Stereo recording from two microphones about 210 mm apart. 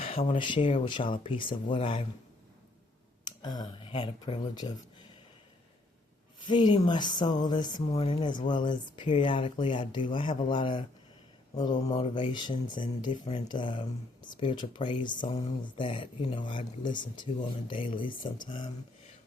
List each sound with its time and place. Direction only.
0.0 s speech: 25° left (ahead or behind)
3.4 s speech: 20° left (ahead or behind)
6.4 s speech: 20° left (ahead or behind)
11.9 s speech: 25° left (ahead or behind)